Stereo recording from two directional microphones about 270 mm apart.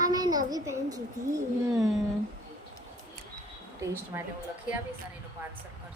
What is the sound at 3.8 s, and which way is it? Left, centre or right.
Speech, centre.